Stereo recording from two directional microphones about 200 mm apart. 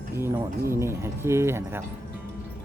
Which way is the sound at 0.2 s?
15° right (ahead or behind).